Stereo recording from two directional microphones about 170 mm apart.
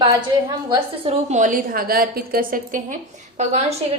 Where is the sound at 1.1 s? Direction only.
45° right (ahead or behind).